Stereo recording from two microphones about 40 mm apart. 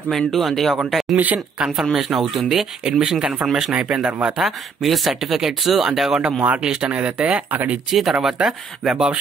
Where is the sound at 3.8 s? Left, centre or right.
Right.